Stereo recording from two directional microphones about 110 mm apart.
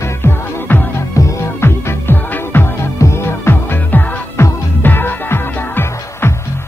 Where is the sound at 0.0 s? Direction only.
25° left (ahead or behind).